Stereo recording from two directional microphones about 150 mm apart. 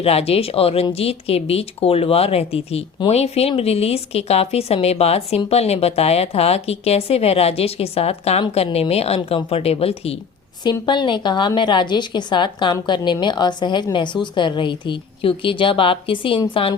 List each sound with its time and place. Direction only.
0.0 s a woman's voice: 40° left (ahead or behind)
10.6 s a woman's voice: 30° left (ahead or behind)